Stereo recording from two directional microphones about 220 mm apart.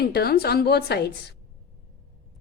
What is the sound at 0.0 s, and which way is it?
A woman's voice, 45° left (ahead or behind).